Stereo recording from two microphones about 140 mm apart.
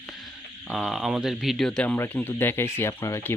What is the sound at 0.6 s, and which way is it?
Speech, centre (ahead or behind).